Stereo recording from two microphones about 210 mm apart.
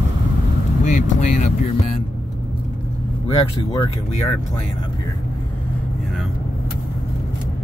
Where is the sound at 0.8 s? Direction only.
35° left (ahead or behind).